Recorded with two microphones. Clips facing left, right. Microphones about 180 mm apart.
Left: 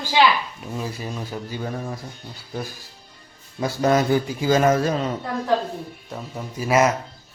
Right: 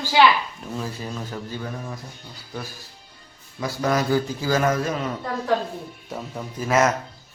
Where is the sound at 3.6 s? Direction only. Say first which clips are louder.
Left 4 dB; 25° left (ahead or behind).